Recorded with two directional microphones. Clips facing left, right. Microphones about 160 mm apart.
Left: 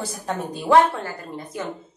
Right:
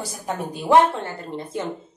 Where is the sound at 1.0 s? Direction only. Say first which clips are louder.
Right 2 dB; 30° right (ahead or behind).